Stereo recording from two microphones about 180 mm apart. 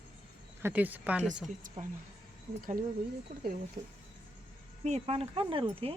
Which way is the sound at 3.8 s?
35° right (ahead or behind).